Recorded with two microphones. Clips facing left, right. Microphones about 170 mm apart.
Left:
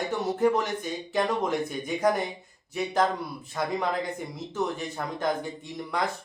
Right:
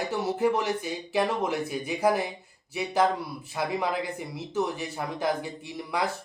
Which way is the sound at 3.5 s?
5° right (ahead or behind).